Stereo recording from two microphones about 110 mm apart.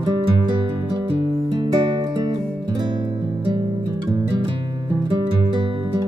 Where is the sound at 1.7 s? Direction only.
40° right (ahead or behind).